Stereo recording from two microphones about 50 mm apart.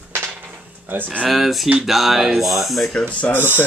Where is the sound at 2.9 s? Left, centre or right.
Left.